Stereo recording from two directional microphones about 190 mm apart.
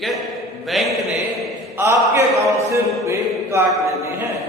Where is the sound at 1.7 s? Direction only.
15° right (ahead or behind).